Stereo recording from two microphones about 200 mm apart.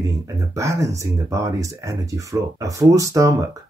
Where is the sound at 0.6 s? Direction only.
15° right (ahead or behind).